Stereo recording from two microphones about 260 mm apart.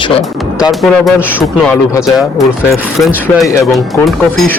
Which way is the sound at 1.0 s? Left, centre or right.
Centre.